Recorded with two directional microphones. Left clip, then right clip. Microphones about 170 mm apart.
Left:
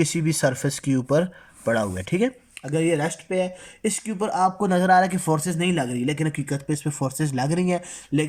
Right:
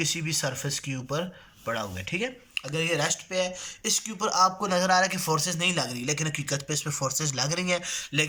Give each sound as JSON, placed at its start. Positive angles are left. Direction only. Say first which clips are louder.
{"t": 0.0, "sound": "speech", "louder": "left 6 dB", "side_deg": 55}